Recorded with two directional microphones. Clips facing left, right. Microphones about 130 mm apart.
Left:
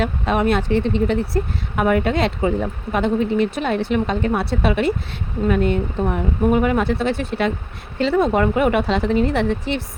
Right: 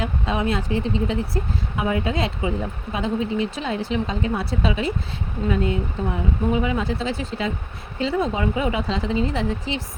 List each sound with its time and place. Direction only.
0.0 s speech: 65° left (ahead or behind)